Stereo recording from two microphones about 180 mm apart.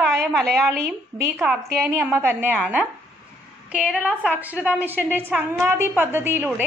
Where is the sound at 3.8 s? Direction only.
10° left (ahead or behind).